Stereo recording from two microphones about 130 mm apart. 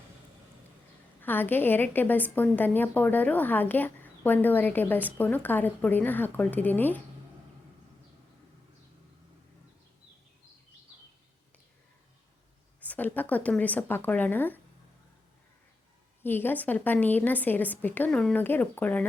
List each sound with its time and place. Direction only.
1.2 s a woman's voice: 15° left (ahead or behind)
12.8 s a woman's voice: 15° left (ahead or behind)
16.2 s a woman's voice: 15° left (ahead or behind)